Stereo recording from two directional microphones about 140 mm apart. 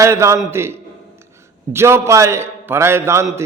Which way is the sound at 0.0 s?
20° right (ahead or behind).